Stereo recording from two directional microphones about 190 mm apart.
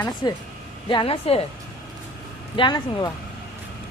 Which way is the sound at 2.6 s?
20° left (ahead or behind).